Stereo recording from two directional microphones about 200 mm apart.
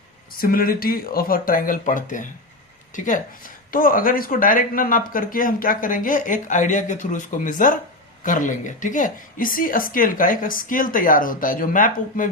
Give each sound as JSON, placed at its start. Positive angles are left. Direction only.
{"t": 0.3, "sound": "a woman's voice", "side_deg": 45}